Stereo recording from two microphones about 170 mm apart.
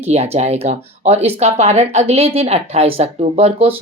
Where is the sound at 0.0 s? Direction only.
40° right (ahead or behind).